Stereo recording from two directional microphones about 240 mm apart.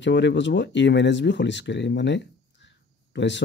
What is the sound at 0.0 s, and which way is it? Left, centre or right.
Speech, left.